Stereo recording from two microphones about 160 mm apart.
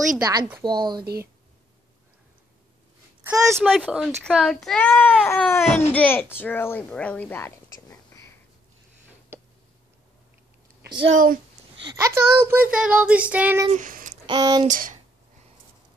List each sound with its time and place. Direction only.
0.2 s speech: 25° right (ahead or behind)
3.3 s child singing: 15° right (ahead or behind)
3.6 s a child's voice: 5° right (ahead or behind); by 7.5 s 10° left (ahead or behind)
9.3 s tick: 15° right (ahead or behind)
11.1 s speech: 55° right (ahead or behind)
11.8 s speech: 25° right (ahead or behind)
12.1 s child singing: 15° right (ahead or behind)
13.7 s a sound: 55° right (ahead or behind)
14.2 s speech: 25° right (ahead or behind)
14.7 s speech: 55° right (ahead or behind)